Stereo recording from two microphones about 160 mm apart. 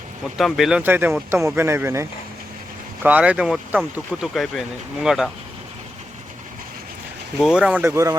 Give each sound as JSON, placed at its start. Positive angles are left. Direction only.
{"t": 0.3, "sound": "speech", "side_deg": 0}
{"t": 7.3, "sound": "speech", "side_deg": -5}